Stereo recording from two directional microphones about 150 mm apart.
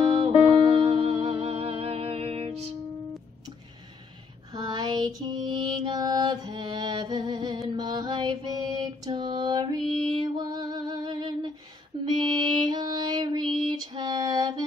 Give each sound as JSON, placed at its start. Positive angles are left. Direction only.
{"t": 0.2, "sound": "music", "side_deg": -40}
{"t": 4.5, "sound": "mantra", "side_deg": -25}
{"t": 10.0, "sound": "music", "side_deg": -35}
{"t": 13.7, "sound": "female singing", "side_deg": -30}